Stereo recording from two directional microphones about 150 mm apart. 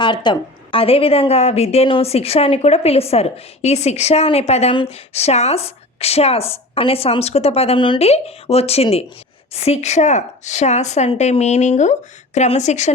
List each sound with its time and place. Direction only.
0.0 s a woman's voice: 30° left (ahead or behind); by 12.9 s 50° left (ahead or behind)